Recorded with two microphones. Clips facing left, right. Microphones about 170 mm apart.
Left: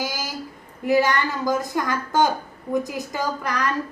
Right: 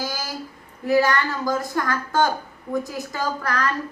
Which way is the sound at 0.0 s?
20° left (ahead or behind).